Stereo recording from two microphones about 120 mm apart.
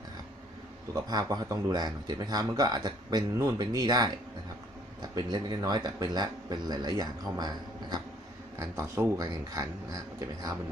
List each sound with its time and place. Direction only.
0.9 s speech: 35° right (ahead or behind)
5.1 s speech: 35° right (ahead or behind)